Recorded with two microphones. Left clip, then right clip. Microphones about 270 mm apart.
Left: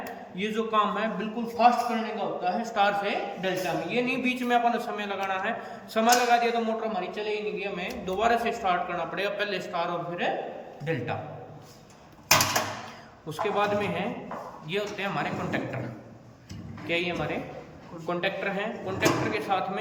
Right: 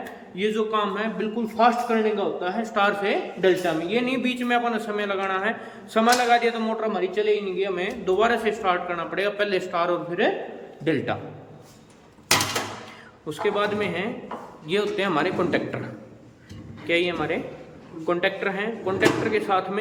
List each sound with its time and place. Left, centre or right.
0.3 s a man's voice: centre
13.2 s speech: centre
14.7 s a man's voice: centre
16.8 s speech: centre